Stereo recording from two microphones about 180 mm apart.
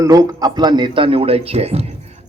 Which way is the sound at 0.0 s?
20° right (ahead or behind).